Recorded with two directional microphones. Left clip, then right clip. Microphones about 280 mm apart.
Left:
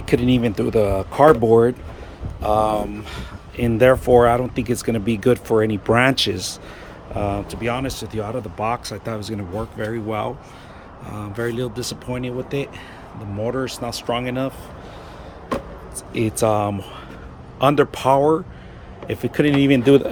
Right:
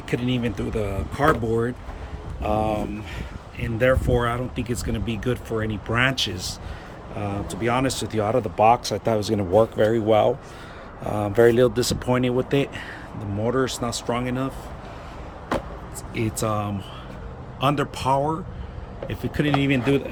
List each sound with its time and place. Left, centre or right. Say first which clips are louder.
0.1 s speech: left 7 dB; centre
16.1 s speech: left 7 dB; centre